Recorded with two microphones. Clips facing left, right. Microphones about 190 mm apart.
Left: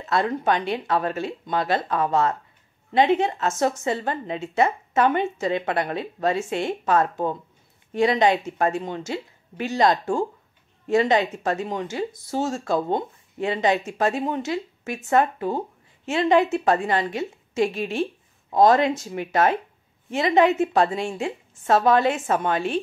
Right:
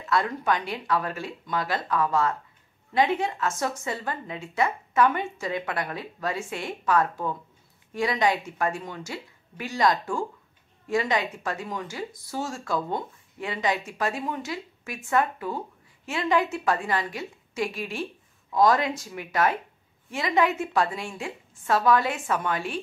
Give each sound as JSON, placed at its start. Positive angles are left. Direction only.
{"t": 0.1, "sound": "speech", "side_deg": 25}